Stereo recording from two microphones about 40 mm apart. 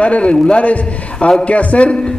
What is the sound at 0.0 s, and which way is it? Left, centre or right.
Speech, left.